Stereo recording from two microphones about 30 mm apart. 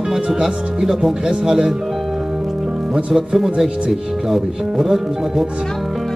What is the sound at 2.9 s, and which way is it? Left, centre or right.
Speech, centre.